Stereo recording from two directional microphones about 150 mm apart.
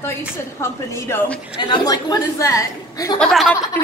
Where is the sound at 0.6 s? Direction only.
20° left (ahead or behind).